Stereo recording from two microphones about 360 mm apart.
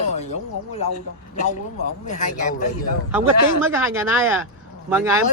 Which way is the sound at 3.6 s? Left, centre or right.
Centre.